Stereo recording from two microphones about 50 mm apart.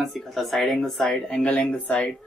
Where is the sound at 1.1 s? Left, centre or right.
Centre.